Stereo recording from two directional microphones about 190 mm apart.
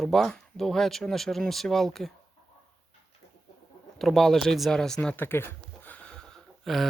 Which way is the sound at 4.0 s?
Centre (ahead or behind).